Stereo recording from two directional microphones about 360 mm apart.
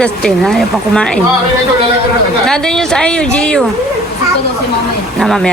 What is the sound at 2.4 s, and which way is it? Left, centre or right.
Speech, centre.